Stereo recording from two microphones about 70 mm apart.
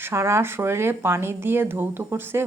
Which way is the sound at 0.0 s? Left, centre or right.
Right.